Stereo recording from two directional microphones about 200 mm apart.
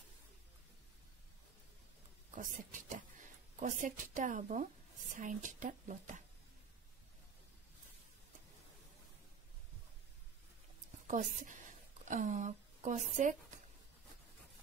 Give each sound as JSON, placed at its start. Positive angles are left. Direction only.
{"t": 2.3, "sound": "speech", "side_deg": -40}
{"t": 11.1, "sound": "speech", "side_deg": -40}